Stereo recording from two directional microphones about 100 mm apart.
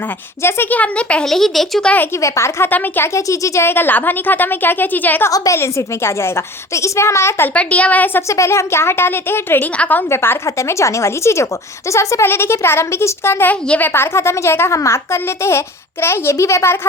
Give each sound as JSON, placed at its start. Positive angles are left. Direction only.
{"t": 0.4, "sound": "speech", "side_deg": 20}
{"t": 2.2, "sound": "speech", "side_deg": 30}
{"t": 3.2, "sound": "speech", "side_deg": 30}
{"t": 5.3, "sound": "speech", "side_deg": 30}
{"t": 7.5, "sound": "speech", "side_deg": 15}
{"t": 8.3, "sound": "speech", "side_deg": 30}